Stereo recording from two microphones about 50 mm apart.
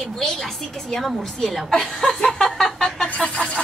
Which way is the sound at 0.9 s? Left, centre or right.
Centre.